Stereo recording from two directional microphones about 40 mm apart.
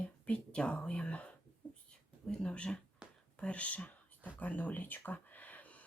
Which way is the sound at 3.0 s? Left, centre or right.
Centre.